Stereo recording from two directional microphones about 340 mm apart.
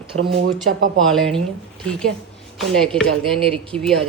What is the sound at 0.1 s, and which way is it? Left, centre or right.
Speech, right.